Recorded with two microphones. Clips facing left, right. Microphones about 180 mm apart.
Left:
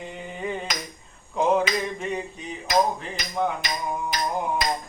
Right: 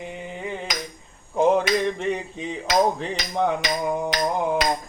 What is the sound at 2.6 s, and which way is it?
Music, 90° right.